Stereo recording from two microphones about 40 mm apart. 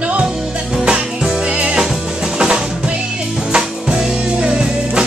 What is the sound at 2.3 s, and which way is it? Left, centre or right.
Drum, centre.